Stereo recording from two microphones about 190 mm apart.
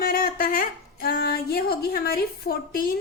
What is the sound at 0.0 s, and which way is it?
A woman's voice, 50° left (ahead or behind).